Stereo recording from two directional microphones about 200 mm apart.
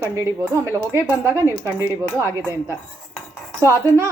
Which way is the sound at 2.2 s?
15° right (ahead or behind).